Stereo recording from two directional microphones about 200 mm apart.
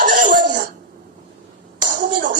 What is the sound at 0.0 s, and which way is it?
Throat clearing, 45° right (ahead or behind).